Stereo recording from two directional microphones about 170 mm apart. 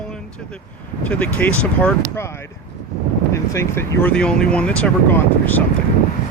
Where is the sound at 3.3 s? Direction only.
15° left (ahead or behind).